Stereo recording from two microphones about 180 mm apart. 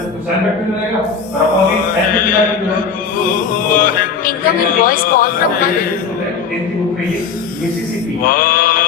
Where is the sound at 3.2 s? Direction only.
50° left (ahead or behind).